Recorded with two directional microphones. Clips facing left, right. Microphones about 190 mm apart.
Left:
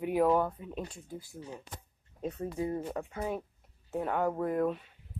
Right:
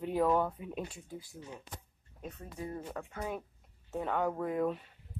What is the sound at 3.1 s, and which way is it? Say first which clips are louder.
A woman's voice: left 4 dB; 10° left (ahead or behind).